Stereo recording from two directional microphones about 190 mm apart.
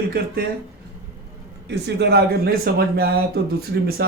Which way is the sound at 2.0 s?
60° right (ahead or behind).